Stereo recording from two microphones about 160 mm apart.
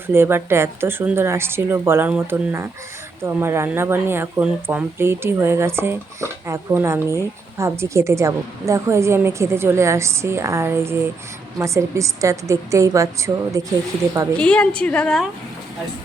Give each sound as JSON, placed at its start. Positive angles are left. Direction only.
{"t": 0.1, "sound": "a woman's voice", "side_deg": -15}
{"t": 14.3, "sound": "a woman's voice", "side_deg": 5}